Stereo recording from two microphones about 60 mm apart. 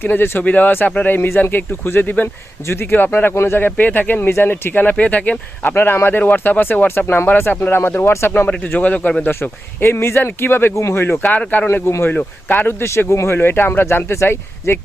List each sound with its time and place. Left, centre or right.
0.0 s speech: left
3.8 s speech: left
5.7 s speech: left
8.6 s speech: left
9.3 s speech: left
11.7 s speech: left
12.0 s speech: left
13.0 s speech: left